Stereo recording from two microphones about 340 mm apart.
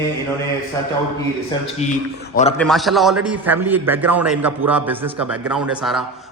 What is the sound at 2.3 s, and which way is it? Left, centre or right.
Speech, centre.